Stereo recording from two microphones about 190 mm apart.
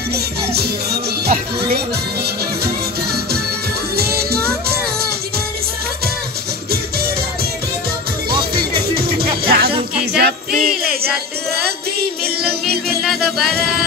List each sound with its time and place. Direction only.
0.1 s music: 55° right (ahead or behind)
8.5 s music: 55° right (ahead or behind)
13.0 s music: centre (ahead or behind)